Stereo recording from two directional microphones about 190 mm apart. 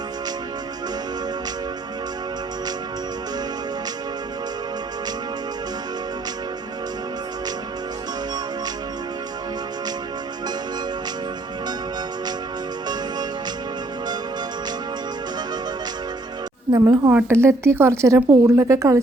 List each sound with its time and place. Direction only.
16.7 s speech: 20° right (ahead or behind)